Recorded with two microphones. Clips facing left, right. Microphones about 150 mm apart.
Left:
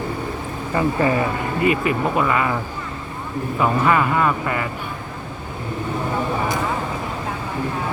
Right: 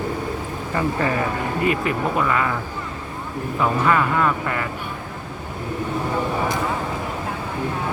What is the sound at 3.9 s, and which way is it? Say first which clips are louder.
Speech: left 1 dB; 10° left (ahead or behind).